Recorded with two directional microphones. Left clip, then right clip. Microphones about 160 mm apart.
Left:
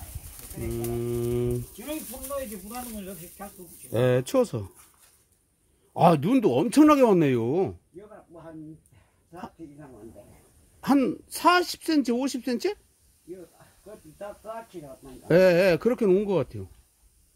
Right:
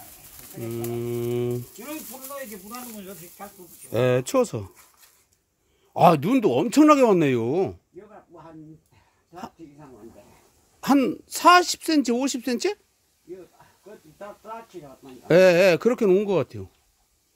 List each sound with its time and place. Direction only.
0.9 s pigeon: 20° right (ahead or behind)
2.7 s speech: 10° right (ahead or behind)
5.9 s speech: 20° right (ahead or behind)
10.8 s speech: 25° right (ahead or behind)
15.2 s speech: 25° right (ahead or behind)